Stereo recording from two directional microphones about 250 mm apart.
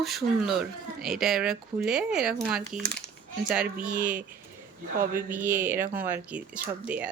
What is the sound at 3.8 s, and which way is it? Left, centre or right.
Speech, right.